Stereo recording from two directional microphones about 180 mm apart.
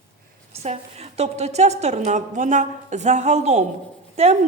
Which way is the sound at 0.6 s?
35° right (ahead or behind).